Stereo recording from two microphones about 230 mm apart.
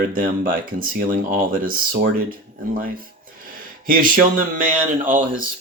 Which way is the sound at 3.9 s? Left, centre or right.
Right.